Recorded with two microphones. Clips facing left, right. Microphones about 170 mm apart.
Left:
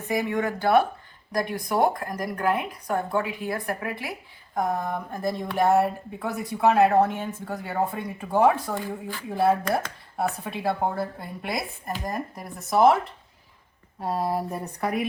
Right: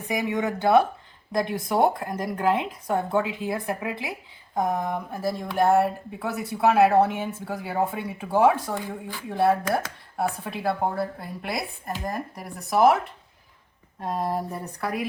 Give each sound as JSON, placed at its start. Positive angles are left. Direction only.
{"t": 0.1, "sound": "speech", "side_deg": -20}
{"t": 5.0, "sound": "speech", "side_deg": -5}
{"t": 14.0, "sound": "speech", "side_deg": 5}